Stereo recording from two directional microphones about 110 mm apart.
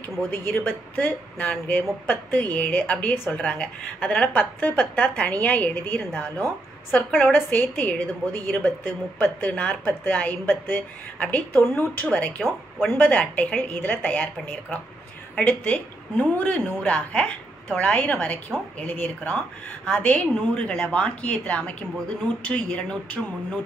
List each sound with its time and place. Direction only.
0.5 s a woman's voice: 20° left (ahead or behind)